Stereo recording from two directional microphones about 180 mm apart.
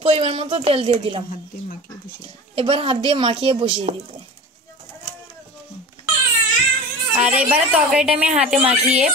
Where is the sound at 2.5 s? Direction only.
30° right (ahead or behind).